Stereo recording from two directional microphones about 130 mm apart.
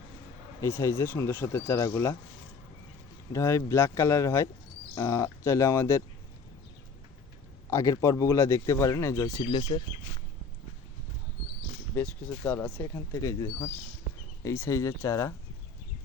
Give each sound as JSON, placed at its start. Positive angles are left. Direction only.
{"t": 0.6, "sound": "speech", "side_deg": 25}
{"t": 3.3, "sound": "speech", "side_deg": 25}
{"t": 7.7, "sound": "speech", "side_deg": 25}
{"t": 9.4, "sound": "speech", "side_deg": 35}
{"t": 11.9, "sound": "speech", "side_deg": 15}